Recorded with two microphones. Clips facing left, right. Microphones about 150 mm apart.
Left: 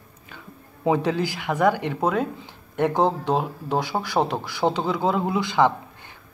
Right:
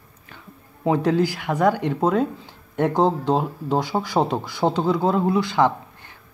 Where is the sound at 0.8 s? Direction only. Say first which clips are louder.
Right 2 dB; 5° left (ahead or behind).